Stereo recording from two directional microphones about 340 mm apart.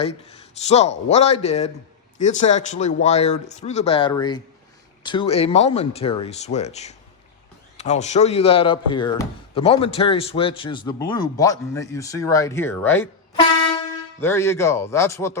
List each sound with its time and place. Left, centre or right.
0.0 s speech: centre